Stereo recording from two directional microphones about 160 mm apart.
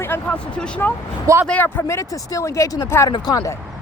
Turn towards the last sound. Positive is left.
turn(degrees=20)  # may be behind; listen again after turning